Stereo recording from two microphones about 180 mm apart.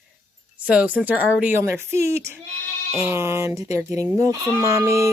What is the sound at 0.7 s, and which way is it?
Speech, 5° right (ahead or behind).